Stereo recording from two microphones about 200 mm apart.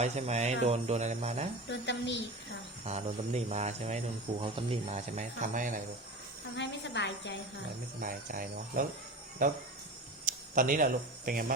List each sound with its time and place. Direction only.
0.0 s cricket: 35° right (ahead or behind)
1.7 s a woman's voice: 60° left (ahead or behind)
2.8 s cricket: 35° right (ahead or behind)
6.6 s a woman's voice: 60° left (ahead or behind)
8.0 s speech: 45° right (ahead or behind)